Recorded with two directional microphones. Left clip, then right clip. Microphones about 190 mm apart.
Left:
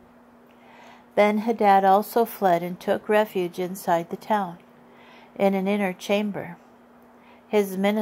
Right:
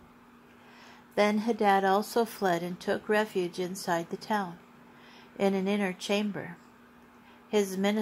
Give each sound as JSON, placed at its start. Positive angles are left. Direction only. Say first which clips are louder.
{"t": 0.8, "sound": "a woman's voice", "louder": "left 7 dB", "side_deg": 30}
{"t": 7.5, "sound": "a woman's voice", "louder": "left 6 dB", "side_deg": 30}